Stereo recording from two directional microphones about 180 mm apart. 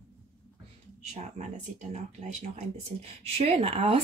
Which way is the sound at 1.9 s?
40° right (ahead or behind).